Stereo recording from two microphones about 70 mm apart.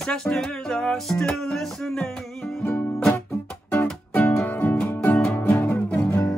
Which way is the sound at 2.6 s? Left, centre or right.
Left.